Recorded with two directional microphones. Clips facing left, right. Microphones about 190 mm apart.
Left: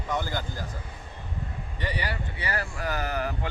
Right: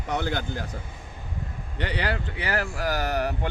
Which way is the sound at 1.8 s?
70° right (ahead or behind).